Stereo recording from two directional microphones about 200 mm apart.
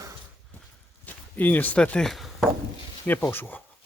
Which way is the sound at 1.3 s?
10° left (ahead or behind).